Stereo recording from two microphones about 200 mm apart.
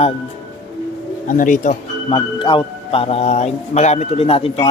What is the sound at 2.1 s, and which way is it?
A man's voice, 25° left (ahead or behind).